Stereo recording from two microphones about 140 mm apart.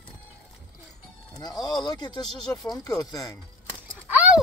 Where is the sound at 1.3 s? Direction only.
30° left (ahead or behind).